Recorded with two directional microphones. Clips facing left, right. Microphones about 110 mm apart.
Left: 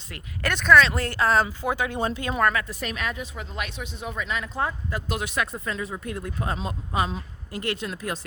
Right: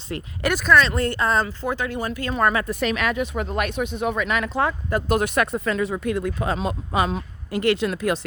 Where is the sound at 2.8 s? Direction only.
85° right.